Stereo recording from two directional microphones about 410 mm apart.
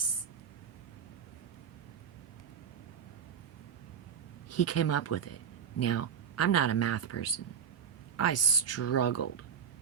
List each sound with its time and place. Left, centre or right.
4.4 s speech: left